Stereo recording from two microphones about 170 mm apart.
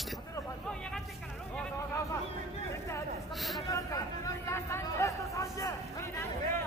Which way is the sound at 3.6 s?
20° left (ahead or behind).